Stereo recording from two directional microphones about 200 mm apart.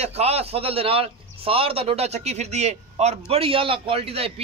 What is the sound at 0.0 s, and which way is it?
A man's voice, 30° right (ahead or behind).